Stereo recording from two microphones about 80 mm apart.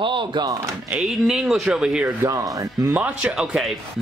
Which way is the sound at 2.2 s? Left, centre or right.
Right.